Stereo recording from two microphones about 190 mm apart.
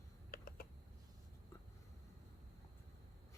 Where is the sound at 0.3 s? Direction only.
50° left (ahead or behind).